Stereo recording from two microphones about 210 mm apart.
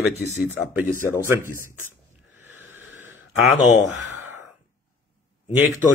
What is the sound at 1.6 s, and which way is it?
Speech, 40° left (ahead or behind).